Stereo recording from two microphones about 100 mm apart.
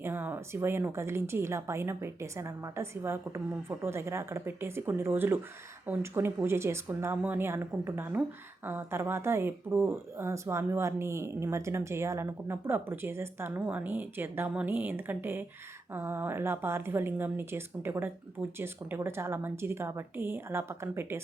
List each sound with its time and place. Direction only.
0.0 s a woman's voice: 20° right (ahead or behind)